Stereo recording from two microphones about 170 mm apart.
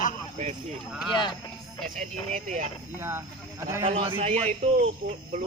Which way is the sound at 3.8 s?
35° right (ahead or behind).